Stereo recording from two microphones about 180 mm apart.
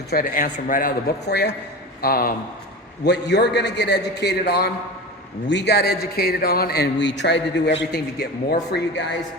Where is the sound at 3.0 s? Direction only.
70° left (ahead or behind).